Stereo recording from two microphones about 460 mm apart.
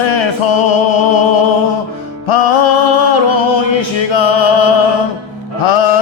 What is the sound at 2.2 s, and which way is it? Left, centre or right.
Music, left.